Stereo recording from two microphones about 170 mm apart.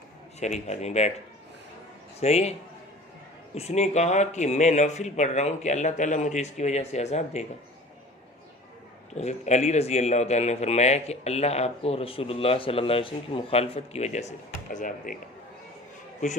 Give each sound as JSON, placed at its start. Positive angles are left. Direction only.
{"t": 0.3, "sound": "a man's voice", "side_deg": 40}
{"t": 2.2, "sound": "a man's voice", "side_deg": 40}
{"t": 9.1, "sound": "a man's voice", "side_deg": 40}